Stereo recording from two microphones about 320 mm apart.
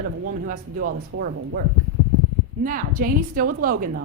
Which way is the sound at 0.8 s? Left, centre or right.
Right.